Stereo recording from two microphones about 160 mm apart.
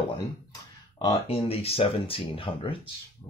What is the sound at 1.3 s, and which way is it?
Speech, 35° left (ahead or behind).